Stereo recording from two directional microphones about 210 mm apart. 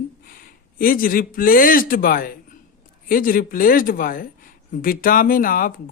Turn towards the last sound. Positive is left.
turn(degrees=40)  # may be behind; listen again after turning